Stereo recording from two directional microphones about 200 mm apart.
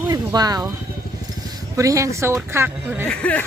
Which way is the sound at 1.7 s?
15° right (ahead or behind).